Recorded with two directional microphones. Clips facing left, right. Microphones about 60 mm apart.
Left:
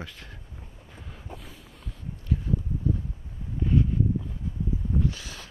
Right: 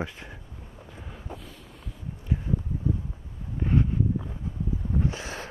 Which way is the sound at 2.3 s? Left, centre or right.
Right.